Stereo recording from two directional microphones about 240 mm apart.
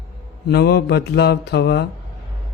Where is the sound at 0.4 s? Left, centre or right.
Left.